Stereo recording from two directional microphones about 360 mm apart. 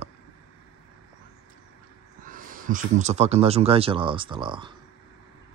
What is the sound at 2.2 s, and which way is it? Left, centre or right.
Speech, right.